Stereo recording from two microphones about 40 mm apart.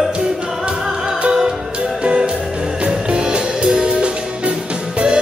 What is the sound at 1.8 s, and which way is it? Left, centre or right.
Music, right.